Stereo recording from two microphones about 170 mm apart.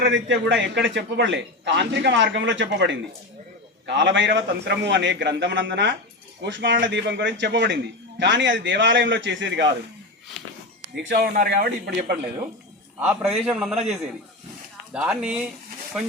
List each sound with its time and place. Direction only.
0.0 s a man's voice: 90° right
11.3 s speech: 65° right (ahead or behind)
13.0 s a man's voice: 5° right (ahead or behind)